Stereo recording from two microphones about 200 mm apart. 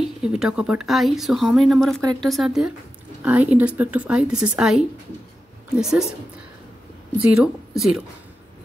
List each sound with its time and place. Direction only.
0.0 s a woman's voice: 5° right (ahead or behind)
7.2 s speech: 5° right (ahead or behind)